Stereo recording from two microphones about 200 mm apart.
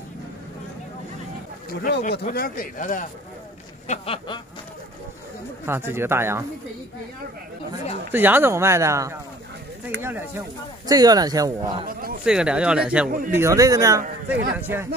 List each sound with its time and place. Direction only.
1.7 s speech: 50° left (ahead or behind)
3.8 s a sound: 30° left (ahead or behind)
5.7 s a man's voice: 10° right (ahead or behind)
8.1 s a man's voice: 10° right (ahead or behind)
11.8 s speech: 45° right (ahead or behind)
12.3 s a man's voice: 5° right (ahead or behind)